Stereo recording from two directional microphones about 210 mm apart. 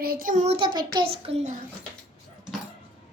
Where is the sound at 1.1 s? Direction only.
25° right (ahead or behind).